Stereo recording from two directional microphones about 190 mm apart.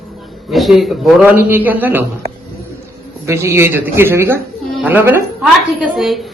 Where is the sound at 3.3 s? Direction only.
15° right (ahead or behind).